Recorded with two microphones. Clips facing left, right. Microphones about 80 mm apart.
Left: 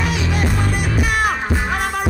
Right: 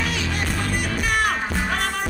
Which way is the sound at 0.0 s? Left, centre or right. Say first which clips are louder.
Left 5 dB; centre.